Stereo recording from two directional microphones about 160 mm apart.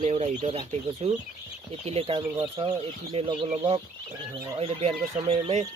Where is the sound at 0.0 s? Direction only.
45° right (ahead or behind).